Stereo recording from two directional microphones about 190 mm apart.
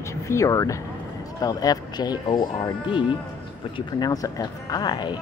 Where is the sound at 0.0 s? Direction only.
15° left (ahead or behind).